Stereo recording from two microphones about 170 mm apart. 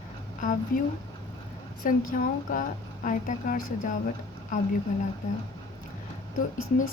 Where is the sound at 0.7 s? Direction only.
55° left (ahead or behind).